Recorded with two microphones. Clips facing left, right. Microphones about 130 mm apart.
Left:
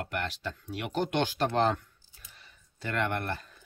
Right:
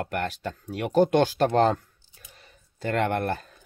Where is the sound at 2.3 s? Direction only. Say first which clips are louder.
Right 3 dB; 45° right (ahead or behind).